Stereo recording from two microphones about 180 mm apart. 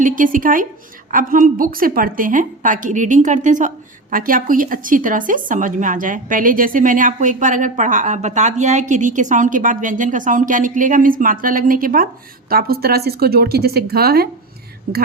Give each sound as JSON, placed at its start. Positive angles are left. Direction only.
{"t": 0.0, "sound": "a woman's voice", "side_deg": -50}